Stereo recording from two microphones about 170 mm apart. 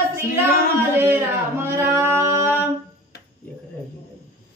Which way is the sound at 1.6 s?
15° right (ahead or behind).